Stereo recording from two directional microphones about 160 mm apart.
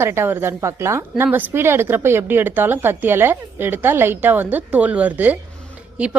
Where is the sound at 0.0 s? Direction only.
15° right (ahead or behind).